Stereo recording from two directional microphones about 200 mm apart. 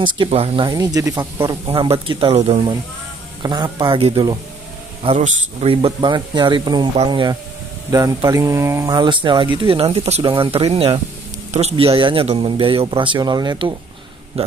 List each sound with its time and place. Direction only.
0.0 s speech: 25° right (ahead or behind)